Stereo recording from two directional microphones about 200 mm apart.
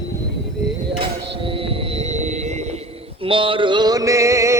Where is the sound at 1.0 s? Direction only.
25° right (ahead or behind).